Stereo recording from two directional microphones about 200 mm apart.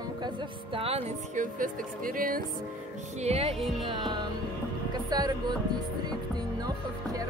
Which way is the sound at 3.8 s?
25° right (ahead or behind).